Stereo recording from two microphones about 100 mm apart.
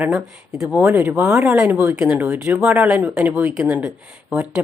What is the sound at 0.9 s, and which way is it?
Speech, 20° right (ahead or behind).